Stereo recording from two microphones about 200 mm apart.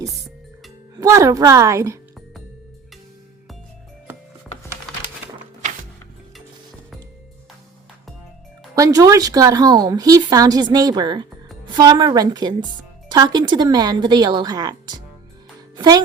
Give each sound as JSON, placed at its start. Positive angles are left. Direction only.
{"t": 0.9, "sound": "a woman's voice", "side_deg": -15}
{"t": 8.7, "sound": "speech", "side_deg": -20}
{"t": 15.7, "sound": "music", "side_deg": -20}